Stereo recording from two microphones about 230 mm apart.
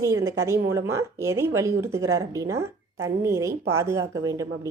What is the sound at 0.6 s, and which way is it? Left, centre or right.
Speech, right.